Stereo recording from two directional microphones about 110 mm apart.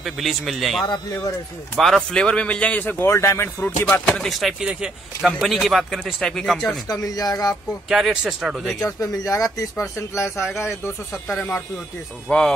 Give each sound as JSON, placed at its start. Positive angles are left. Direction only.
{"t": 0.0, "sound": "a man's voice", "side_deg": 0}
{"t": 3.9, "sound": "speech", "side_deg": 10}
{"t": 6.9, "sound": "speech", "side_deg": 35}
{"t": 7.9, "sound": "speech", "side_deg": -5}
{"t": 8.8, "sound": "speech", "side_deg": 30}
{"t": 12.3, "sound": "a man's voice", "side_deg": 5}